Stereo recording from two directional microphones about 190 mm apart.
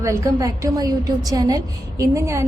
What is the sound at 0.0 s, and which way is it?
A woman's voice, 15° right (ahead or behind).